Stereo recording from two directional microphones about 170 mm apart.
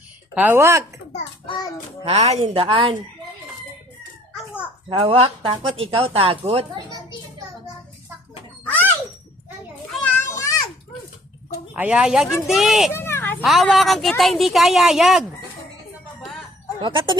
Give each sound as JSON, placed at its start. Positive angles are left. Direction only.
{"t": 0.3, "sound": "speech", "side_deg": -10}
{"t": 1.5, "sound": "child singing", "side_deg": 25}
{"t": 2.0, "sound": "speech", "side_deg": -40}
{"t": 4.9, "sound": "speech", "side_deg": -35}
{"t": 10.0, "sound": "children playing", "side_deg": 15}
{"t": 11.7, "sound": "a woman's voice", "side_deg": -10}
{"t": 12.9, "sound": "children playing", "side_deg": 15}
{"t": 13.4, "sound": "a woman's voice", "side_deg": 0}
{"t": 16.8, "sound": "speech", "side_deg": -30}